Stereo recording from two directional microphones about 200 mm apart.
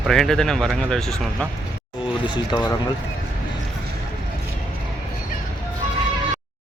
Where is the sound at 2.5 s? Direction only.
20° left (ahead or behind).